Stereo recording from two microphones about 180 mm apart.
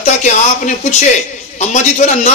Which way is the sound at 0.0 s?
40° left (ahead or behind).